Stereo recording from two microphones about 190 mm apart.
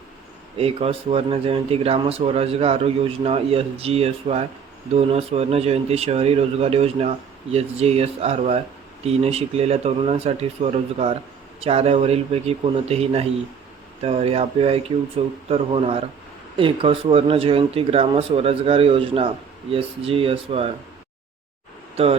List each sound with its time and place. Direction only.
0.5 s speech: 30° right (ahead or behind)